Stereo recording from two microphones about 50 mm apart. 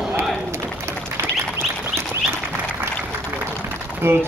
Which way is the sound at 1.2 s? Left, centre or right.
Right.